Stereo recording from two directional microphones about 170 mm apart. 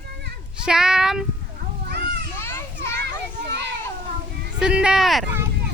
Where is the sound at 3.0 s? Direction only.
80° right.